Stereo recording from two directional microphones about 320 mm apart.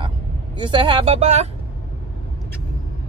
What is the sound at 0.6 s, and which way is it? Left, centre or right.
Speech, centre.